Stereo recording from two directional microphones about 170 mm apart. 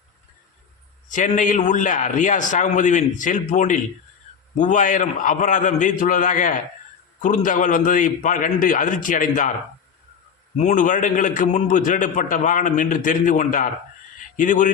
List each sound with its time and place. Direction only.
1.1 s a man's voice: 45° left (ahead or behind)
10.6 s a man's voice: 50° left (ahead or behind)